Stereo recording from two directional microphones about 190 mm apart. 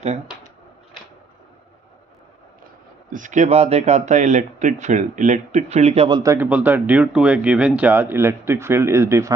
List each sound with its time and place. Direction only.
3.1 s speech: 40° right (ahead or behind); by 9.3 s 15° right (ahead or behind)